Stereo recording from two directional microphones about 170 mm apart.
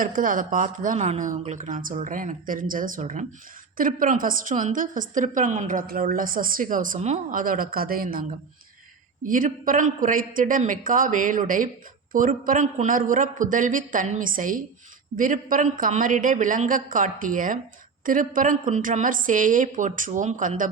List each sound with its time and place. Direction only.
0.0 s a woman's voice: 50° right (ahead or behind)